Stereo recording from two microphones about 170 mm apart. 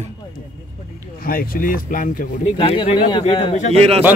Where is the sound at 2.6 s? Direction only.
35° left (ahead or behind).